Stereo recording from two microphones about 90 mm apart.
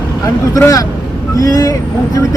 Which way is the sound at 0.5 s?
40° left (ahead or behind).